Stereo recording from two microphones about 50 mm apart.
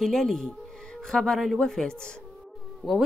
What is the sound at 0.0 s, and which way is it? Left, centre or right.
A woman's voice, centre.